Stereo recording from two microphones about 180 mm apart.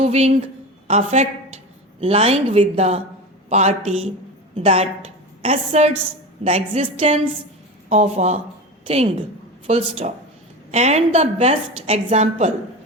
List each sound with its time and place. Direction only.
0.0 s a woman's voice: 35° right (ahead or behind)